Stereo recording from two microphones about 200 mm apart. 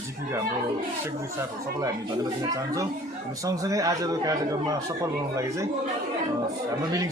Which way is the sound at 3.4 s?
15° right (ahead or behind).